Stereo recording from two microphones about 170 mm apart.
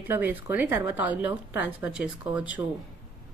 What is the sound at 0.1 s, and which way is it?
Speech, 10° right (ahead or behind).